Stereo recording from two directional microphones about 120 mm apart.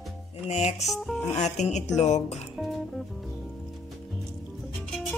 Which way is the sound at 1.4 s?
70° left (ahead or behind).